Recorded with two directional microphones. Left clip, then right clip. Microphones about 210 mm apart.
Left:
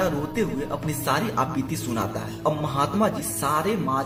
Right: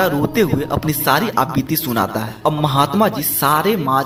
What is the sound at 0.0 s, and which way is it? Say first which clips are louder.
A man's voice: right 9 dB; 35° right (ahead or behind).